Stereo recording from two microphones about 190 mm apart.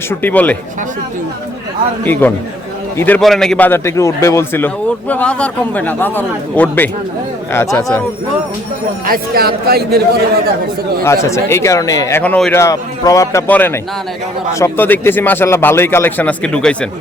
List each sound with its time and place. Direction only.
0.1 s a man's voice: 10° left (ahead or behind)
2.2 s a man's voice: 10° left (ahead or behind)
9.0 s speech: 50° right (ahead or behind)
11.0 s a man's voice: 15° left (ahead or behind)